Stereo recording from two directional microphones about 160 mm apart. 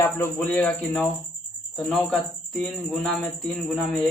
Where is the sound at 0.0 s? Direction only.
10° left (ahead or behind).